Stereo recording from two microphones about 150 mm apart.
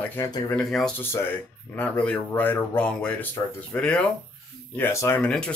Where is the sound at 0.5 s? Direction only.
5° left (ahead or behind).